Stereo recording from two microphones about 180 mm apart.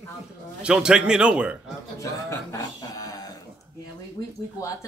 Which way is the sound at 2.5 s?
20° left (ahead or behind).